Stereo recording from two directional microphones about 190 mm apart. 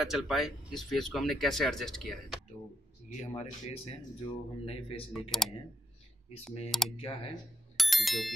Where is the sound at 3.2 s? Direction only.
35° left (ahead or behind).